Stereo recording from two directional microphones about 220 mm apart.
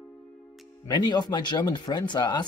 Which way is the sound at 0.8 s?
20° left (ahead or behind).